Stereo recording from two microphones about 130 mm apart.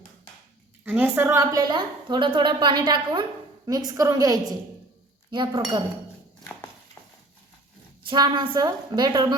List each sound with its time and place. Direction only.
0.9 s a woman's voice: 15° right (ahead or behind); by 5.8 s 35° right (ahead or behind)
8.0 s a woman's voice: 35° right (ahead or behind)